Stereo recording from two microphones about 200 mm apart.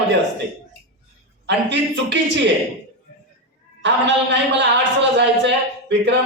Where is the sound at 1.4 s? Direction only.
60° right (ahead or behind).